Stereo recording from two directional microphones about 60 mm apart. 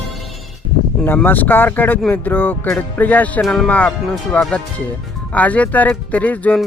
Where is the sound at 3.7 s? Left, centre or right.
Left.